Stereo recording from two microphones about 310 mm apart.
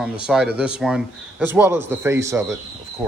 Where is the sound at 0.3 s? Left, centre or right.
Centre.